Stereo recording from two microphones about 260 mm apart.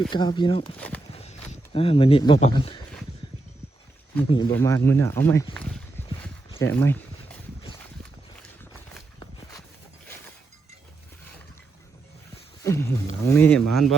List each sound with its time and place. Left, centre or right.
0.1 s speech: centre
0.8 s speech: centre
1.1 s speech: left
4.3 s speech: centre
6.6 s a sound: centre
12.6 s wild animals: centre
13.2 s speech: centre